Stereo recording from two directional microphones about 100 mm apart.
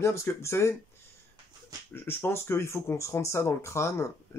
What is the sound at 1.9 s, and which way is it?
Speech, 25° left (ahead or behind).